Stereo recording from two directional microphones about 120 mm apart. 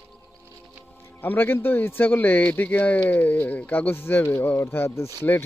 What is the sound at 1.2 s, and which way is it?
Speech, 15° left (ahead or behind).